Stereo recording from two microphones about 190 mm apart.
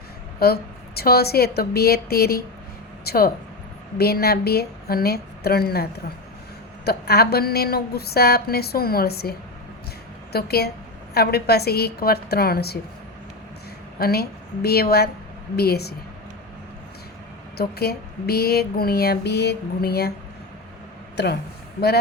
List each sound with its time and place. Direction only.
0.3 s speech: 55° left (ahead or behind)
10.3 s speech: 55° left (ahead or behind)
14.0 s speech: 55° left (ahead or behind)
17.6 s speech: 55° left (ahead or behind)
21.2 s speech: 60° left (ahead or behind)